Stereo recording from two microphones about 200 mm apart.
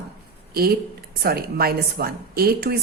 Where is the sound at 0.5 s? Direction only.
50° right (ahead or behind).